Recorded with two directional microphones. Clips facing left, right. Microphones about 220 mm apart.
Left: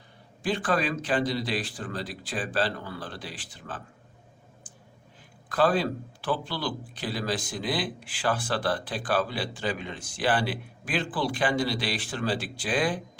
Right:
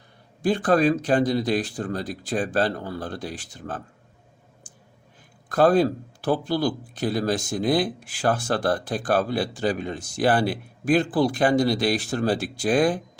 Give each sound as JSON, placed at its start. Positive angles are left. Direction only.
{"t": 0.4, "sound": "speech", "side_deg": -45}
{"t": 5.5, "sound": "speech", "side_deg": -45}